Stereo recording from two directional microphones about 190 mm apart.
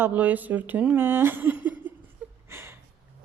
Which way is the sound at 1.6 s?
10° right (ahead or behind).